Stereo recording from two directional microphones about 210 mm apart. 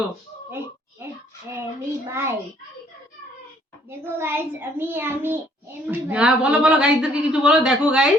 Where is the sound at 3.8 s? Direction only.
10° right (ahead or behind).